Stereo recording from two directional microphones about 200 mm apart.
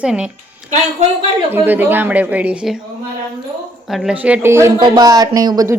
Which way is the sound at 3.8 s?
Centre (ahead or behind).